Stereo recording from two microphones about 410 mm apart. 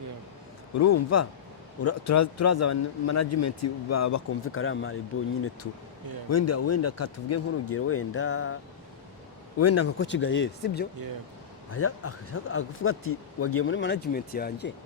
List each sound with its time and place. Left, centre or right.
0.8 s a man's voice: left
6.3 s a man's voice: left
9.6 s a man's voice: left